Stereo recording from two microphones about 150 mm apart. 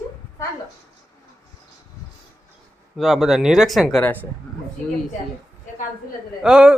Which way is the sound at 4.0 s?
10° left (ahead or behind).